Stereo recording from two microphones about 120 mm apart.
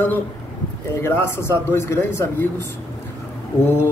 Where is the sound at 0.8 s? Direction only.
20° left (ahead or behind).